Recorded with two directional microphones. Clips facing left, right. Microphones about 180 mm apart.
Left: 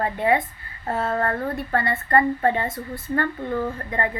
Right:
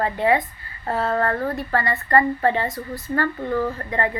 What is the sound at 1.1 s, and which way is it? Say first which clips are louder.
Speech: right 2 dB; 25° left (ahead or behind).